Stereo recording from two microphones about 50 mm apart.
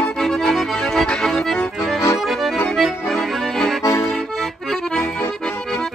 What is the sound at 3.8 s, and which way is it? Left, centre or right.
Accordion, left.